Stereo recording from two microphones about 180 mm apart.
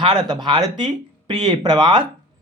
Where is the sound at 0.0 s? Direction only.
25° right (ahead or behind).